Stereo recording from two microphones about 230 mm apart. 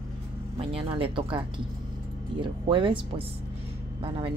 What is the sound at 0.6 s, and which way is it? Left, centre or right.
Speech, right.